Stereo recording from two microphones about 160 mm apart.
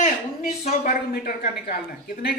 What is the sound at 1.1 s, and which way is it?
Speech, 80° left.